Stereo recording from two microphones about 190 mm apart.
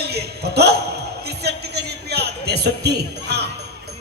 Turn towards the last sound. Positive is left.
turn(degrees=-60)  # may be behind; listen again after turning